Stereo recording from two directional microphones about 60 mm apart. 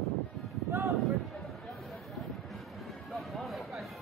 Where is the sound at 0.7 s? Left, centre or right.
Right.